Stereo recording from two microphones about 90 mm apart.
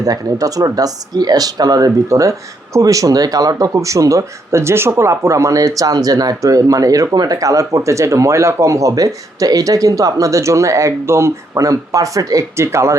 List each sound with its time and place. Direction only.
0.0 s speech: 40° right (ahead or behind)